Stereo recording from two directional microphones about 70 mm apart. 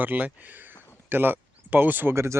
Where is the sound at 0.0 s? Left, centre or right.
Right.